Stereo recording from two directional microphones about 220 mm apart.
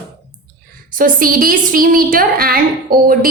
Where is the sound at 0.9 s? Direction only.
40° right (ahead or behind).